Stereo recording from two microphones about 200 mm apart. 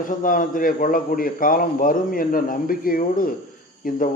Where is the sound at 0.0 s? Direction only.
40° left (ahead or behind).